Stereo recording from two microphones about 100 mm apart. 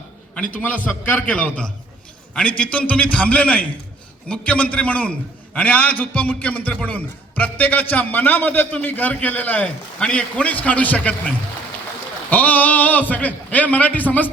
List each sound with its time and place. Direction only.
0.3 s a man's voice: 15° left (ahead or behind)